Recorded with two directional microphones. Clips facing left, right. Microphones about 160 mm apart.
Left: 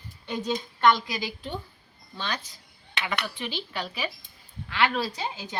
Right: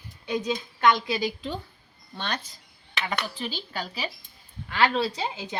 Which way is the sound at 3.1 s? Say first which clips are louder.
Even; 40° right (ahead or behind).